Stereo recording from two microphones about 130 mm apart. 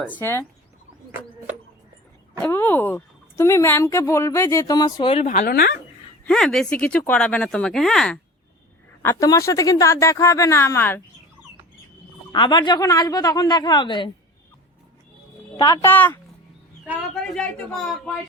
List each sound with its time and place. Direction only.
0.2 s speech: 20° left (ahead or behind)
2.4 s a woman's voice: 15° left (ahead or behind)
5.0 s a woman's voice: 55° left (ahead or behind)
6.2 s speech: 5° left (ahead or behind)
9.0 s speech: 20° left (ahead or behind)
12.3 s speech: 35° left (ahead or behind)
15.5 s speech: 30° left (ahead or behind)
17.2 s speech: 5° left (ahead or behind)